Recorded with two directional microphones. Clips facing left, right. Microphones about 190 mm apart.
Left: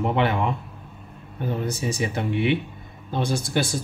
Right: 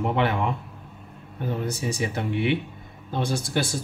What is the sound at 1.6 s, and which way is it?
Speech, 20° left (ahead or behind).